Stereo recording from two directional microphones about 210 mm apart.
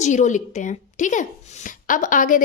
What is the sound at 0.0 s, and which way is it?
A woman's voice, 35° left (ahead or behind).